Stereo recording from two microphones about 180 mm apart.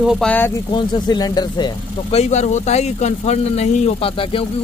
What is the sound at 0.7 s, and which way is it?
Speech, 25° left (ahead or behind).